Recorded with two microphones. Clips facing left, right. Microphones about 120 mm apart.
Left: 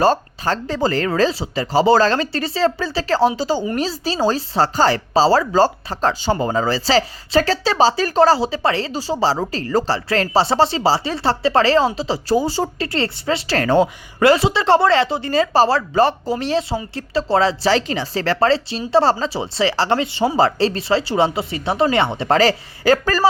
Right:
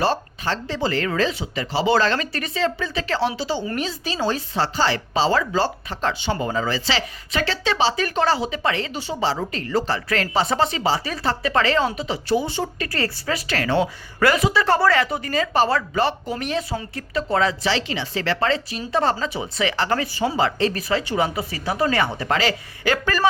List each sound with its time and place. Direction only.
0.0 s speech: 45° left (ahead or behind); by 13.6 s 25° left (ahead or behind)
13.6 s speech: 40° left (ahead or behind)
14.2 s speech: 30° left (ahead or behind)
22.4 s speech: 40° left (ahead or behind)